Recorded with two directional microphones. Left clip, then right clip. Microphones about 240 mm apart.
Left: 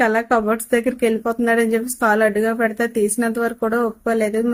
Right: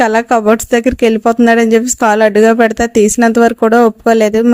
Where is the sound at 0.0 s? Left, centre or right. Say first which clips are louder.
Right 7 dB; right.